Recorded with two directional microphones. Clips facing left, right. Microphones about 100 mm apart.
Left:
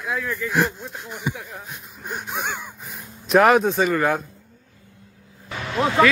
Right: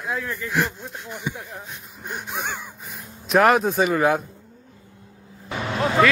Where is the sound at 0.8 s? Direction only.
5° left (ahead or behind).